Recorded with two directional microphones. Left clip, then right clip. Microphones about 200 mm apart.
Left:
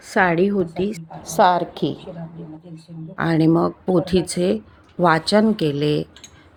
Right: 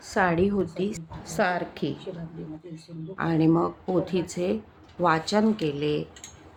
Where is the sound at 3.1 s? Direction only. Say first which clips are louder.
Left 5 dB; 30° left (ahead or behind).